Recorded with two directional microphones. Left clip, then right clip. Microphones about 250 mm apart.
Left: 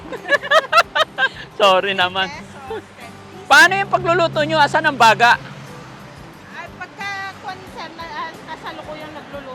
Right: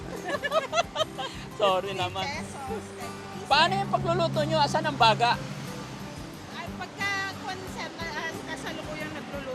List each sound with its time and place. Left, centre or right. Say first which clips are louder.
0.3 s a sound: left 13 dB; left
0.7 s music: left 13 dB; left
3.5 s speech: left 12 dB; left
6.6 s music: left 4 dB; left